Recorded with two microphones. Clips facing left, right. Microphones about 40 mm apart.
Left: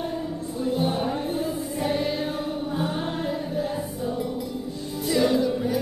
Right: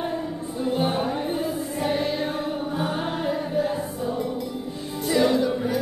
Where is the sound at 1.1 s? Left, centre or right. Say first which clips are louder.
Right 1 dB; centre.